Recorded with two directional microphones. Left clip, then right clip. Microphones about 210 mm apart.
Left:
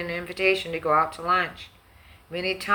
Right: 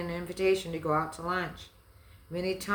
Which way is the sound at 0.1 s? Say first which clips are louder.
Left 5 dB; 20° right (ahead or behind).